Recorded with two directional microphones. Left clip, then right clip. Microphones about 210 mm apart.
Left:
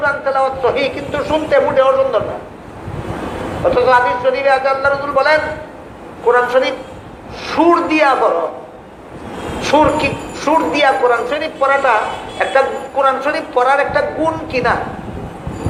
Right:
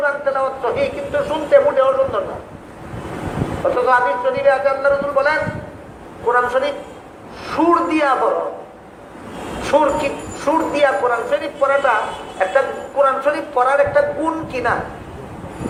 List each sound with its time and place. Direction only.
0.0 s a man's voice: 40° left (ahead or behind)
3.8 s speech: 40° left (ahead or behind)
9.6 s speech: 40° left (ahead or behind)